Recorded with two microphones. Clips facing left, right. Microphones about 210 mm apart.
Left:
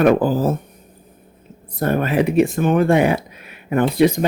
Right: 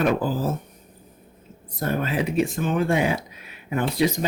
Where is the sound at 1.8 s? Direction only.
60° left (ahead or behind).